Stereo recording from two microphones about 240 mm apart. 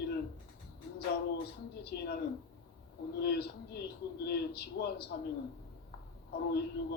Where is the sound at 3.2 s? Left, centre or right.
Left.